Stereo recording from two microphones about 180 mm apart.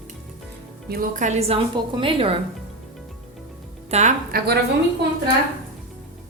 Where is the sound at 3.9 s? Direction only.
35° right (ahead or behind).